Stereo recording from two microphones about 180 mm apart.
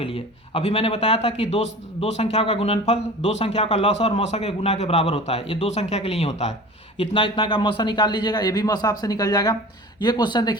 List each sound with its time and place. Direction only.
0.0 s a man's voice: 30° left (ahead or behind)